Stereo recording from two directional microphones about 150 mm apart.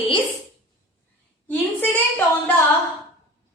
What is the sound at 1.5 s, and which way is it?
A woman's voice, 10° left (ahead or behind).